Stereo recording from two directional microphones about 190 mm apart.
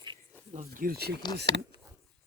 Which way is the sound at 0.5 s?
40° right (ahead or behind).